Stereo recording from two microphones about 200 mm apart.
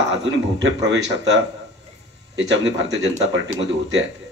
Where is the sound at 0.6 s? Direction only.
60° right (ahead or behind).